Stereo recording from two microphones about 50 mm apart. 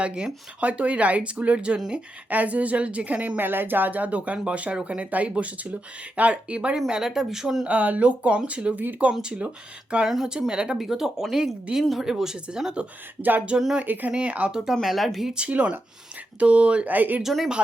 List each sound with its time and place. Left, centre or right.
0.0 s speech: centre
3.4 s speech: right; by 7.7 s centre
7.7 s speech: right
13.8 s speech: right
14.2 s speech: right
14.5 s speech: centre
15.4 s speech: right
16.9 s speech: right
17.2 s speech: centre